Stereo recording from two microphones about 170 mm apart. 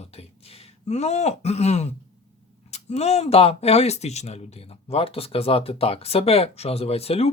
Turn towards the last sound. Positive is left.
turn(degrees=35)  # may be behind; listen again after turning